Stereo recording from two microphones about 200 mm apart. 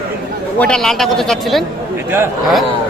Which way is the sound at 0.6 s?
5° left (ahead or behind).